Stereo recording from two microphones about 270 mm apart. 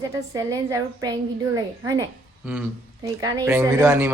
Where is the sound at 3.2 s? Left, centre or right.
Centre.